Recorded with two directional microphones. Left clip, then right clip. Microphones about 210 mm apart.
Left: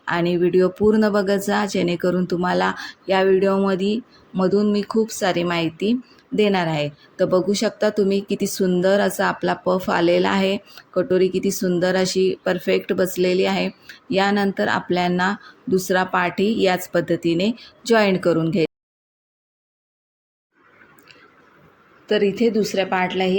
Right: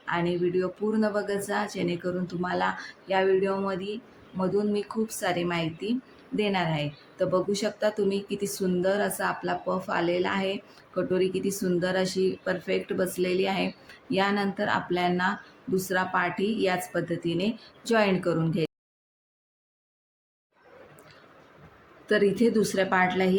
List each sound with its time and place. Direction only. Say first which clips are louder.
0.0 s speech: left 7 dB; 35° left (ahead or behind)
22.0 s speech: left 4 dB; 15° left (ahead or behind)